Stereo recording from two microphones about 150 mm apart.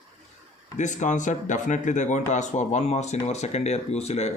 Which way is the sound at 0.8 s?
55° left (ahead or behind).